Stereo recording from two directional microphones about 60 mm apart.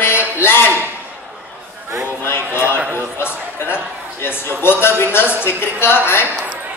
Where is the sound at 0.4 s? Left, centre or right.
Left.